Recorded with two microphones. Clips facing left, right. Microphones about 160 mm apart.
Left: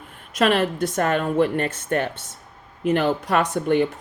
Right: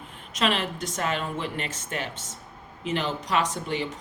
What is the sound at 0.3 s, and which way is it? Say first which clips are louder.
Speech: left 7 dB; 55° left (ahead or behind).